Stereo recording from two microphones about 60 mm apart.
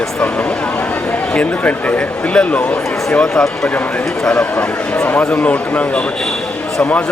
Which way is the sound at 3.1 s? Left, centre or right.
Centre.